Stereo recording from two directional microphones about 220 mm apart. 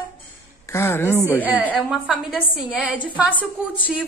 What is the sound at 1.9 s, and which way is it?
A woman's voice, 5° right (ahead or behind).